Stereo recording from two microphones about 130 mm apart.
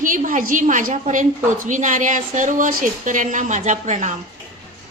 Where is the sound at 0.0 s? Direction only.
90° right; by 4.2 s 65° right (ahead or behind).